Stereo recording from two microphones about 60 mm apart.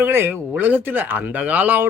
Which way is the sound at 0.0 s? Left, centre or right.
Right.